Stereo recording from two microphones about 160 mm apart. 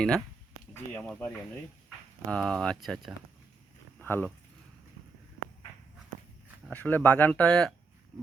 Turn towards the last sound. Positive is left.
turn(degrees=5)  # may be behind; listen again after turning